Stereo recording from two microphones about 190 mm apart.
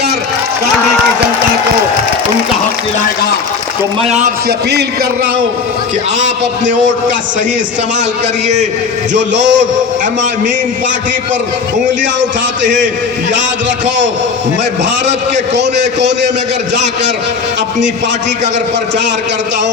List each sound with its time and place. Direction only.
4.4 s a man's voice: 60° right (ahead or behind)
9.1 s a man's voice: 70° right (ahead or behind)
12.2 s a man's voice: 40° right (ahead or behind)
15.5 s a man's voice: 65° right (ahead or behind)